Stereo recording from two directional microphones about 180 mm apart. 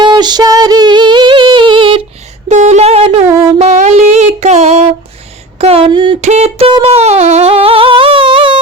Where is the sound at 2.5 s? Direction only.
40° right (ahead or behind).